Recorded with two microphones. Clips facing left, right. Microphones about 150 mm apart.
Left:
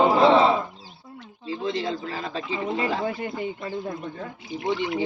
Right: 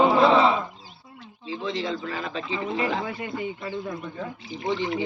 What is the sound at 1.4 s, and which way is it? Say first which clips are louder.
A man's voice: left 2 dB; 40° left (ahead or behind).